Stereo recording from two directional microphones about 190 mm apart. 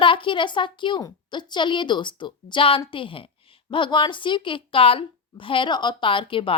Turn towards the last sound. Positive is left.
turn(degrees=25)  # may be behind; listen again after turning